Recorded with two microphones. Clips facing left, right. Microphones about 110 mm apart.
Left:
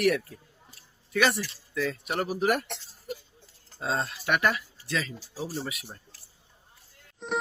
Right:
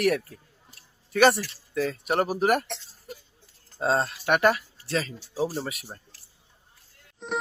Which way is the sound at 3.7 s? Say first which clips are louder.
Right 5 dB; 45° right (ahead or behind).